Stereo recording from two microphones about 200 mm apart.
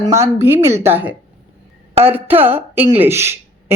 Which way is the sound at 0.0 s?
15° right (ahead or behind).